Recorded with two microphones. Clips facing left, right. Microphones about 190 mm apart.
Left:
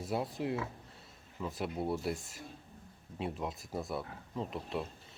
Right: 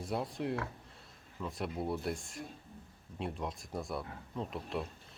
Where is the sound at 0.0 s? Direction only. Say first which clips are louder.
Left 1 dB; centre (ahead or behind).